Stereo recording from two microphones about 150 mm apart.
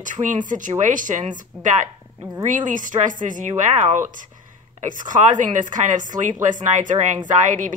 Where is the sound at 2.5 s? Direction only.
60° right (ahead or behind).